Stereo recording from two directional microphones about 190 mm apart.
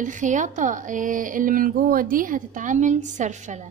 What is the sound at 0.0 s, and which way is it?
Speech, 40° right (ahead or behind).